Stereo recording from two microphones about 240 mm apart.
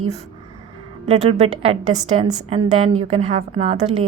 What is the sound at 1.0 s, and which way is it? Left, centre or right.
A woman's voice, right.